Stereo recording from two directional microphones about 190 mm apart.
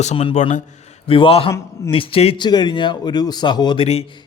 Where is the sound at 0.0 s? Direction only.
30° left (ahead or behind).